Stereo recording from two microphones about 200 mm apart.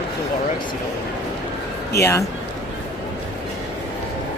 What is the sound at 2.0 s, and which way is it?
Speech, 15° left (ahead or behind).